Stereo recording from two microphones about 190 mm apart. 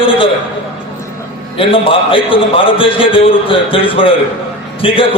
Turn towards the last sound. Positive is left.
turn(degrees=30)  # may be behind; listen again after turning